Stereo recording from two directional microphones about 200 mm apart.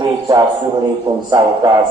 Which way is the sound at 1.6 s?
20° right (ahead or behind).